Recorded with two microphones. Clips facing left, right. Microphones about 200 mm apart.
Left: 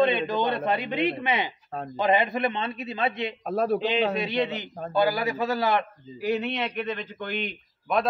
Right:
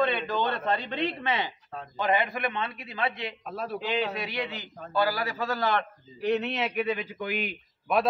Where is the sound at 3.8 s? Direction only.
20° left (ahead or behind).